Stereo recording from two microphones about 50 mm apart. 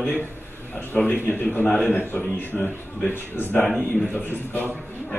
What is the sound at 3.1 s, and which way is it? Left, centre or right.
Speech, left.